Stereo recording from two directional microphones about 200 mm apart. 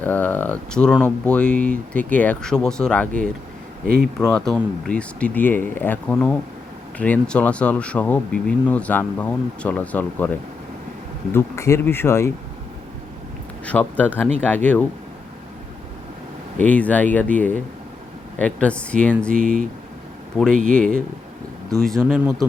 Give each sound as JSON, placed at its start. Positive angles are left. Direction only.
{"t": 0.0, "sound": "speech", "side_deg": 10}
{"t": 13.7, "sound": "speech", "side_deg": 10}
{"t": 16.6, "sound": "speech", "side_deg": 5}
{"t": 19.4, "sound": "speech", "side_deg": -45}
{"t": 20.3, "sound": "speech", "side_deg": 0}
{"t": 21.8, "sound": "speech", "side_deg": 0}